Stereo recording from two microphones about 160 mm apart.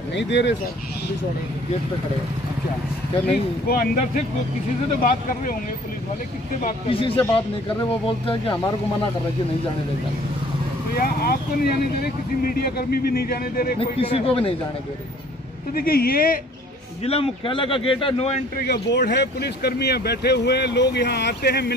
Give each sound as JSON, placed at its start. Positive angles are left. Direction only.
{"t": 0.1, "sound": "speech", "side_deg": 90}
{"t": 3.6, "sound": "speech", "side_deg": 65}
{"t": 6.9, "sound": "speech", "side_deg": 35}
{"t": 11.0, "sound": "speech", "side_deg": 70}
{"t": 13.9, "sound": "speech", "side_deg": 35}
{"t": 15.7, "sound": "speech", "side_deg": 70}
{"t": 17.0, "sound": "speech", "side_deg": 35}
{"t": 18.7, "sound": "speech", "side_deg": 90}